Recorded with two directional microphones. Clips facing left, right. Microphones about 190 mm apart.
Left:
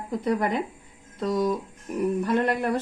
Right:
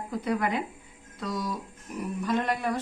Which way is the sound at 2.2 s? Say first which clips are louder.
Even; 60° left (ahead or behind).